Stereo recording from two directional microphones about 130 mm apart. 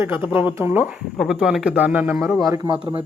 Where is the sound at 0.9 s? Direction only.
5° right (ahead or behind).